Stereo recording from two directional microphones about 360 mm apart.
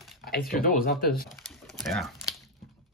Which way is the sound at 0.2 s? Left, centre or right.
Left.